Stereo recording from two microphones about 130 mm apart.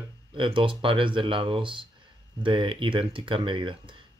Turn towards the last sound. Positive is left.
turn(degrees=-40)  # may be behind; listen again after turning